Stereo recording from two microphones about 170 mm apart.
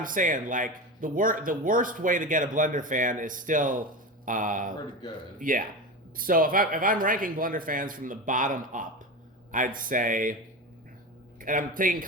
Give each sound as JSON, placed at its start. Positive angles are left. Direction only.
{"t": 0.0, "sound": "speech", "side_deg": -50}
{"t": 11.3, "sound": "speech", "side_deg": -50}